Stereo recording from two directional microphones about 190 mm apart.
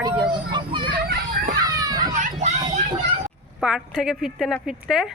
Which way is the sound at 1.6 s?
20° right (ahead or behind).